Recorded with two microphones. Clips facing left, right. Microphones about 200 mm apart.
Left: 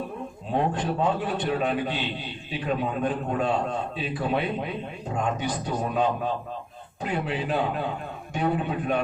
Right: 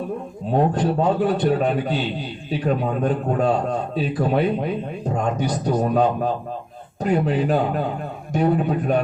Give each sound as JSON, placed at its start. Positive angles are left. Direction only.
{"t": 0.5, "sound": "a man's voice", "side_deg": -40}